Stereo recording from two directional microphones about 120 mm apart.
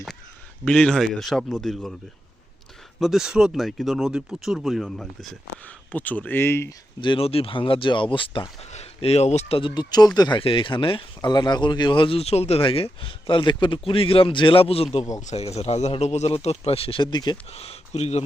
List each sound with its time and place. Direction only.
0.6 s speech: 5° left (ahead or behind)
3.0 s speech: 5° right (ahead or behind); by 6.7 s 20° left (ahead or behind)
7.0 s speech: 45° left (ahead or behind)
8.7 s speech: 60° left (ahead or behind)
9.6 s speech: 40° left (ahead or behind)
17.5 s speech: 55° left (ahead or behind)